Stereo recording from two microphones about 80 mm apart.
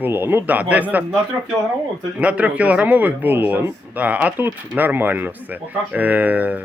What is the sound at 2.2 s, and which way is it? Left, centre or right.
Speech, centre.